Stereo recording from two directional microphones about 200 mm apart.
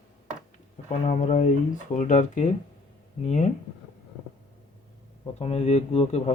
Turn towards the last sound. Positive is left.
turn(degrees=30)  # may be behind; listen again after turning